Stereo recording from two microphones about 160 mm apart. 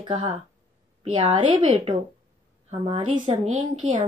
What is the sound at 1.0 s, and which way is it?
A woman's voice, 40° right (ahead or behind).